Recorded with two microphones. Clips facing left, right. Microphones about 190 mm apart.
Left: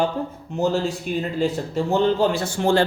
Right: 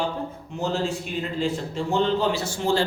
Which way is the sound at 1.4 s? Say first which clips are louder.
Left 3 dB; 45° left (ahead or behind).